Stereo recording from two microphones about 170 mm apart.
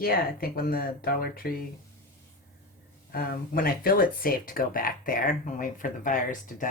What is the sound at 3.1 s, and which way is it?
Speech, 60° left (ahead or behind).